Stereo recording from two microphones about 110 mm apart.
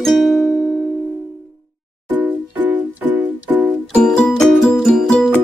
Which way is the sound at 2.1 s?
15° right (ahead or behind).